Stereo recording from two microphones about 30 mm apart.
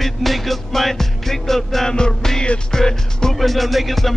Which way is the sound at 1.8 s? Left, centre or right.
Left.